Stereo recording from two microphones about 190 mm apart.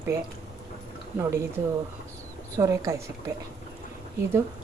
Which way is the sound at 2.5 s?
15° right (ahead or behind).